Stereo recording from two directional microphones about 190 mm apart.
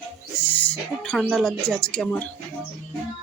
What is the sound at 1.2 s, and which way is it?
Speech, centre (ahead or behind).